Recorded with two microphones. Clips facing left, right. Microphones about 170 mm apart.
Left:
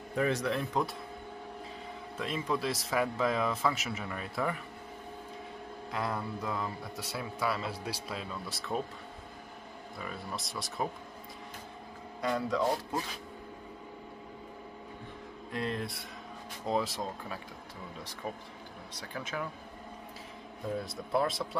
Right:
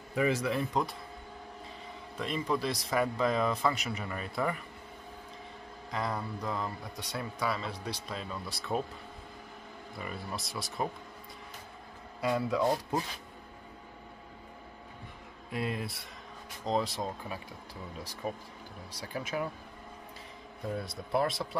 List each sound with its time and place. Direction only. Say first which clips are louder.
0.1 s speech: right 1 dB; centre (ahead or behind)
2.1 s speech: right 1 dB; centre (ahead or behind)
5.9 s speech: even; centre (ahead or behind)
9.9 s speech: right 1 dB; centre (ahead or behind)
12.2 s speech: right 1 dB; 5° right (ahead or behind)
15.5 s speech: even; 5° right (ahead or behind)
18.2 s speech: right 3 dB; 10° right (ahead or behind)
20.7 s speech: even; centre (ahead or behind)